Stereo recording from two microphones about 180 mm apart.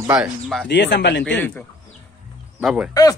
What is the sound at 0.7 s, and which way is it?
Speech, 70° left (ahead or behind).